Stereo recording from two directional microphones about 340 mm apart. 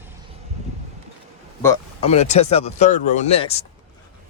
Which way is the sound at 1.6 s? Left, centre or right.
Centre.